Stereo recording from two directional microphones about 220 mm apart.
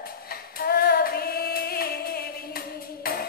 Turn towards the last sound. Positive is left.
turn(degrees=45)  # may be behind; listen again after turning